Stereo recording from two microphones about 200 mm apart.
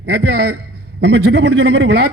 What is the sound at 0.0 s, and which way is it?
Speech, 55° right (ahead or behind).